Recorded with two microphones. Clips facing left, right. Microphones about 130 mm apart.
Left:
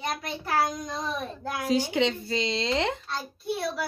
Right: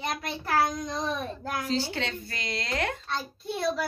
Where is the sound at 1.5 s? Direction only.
15° left (ahead or behind).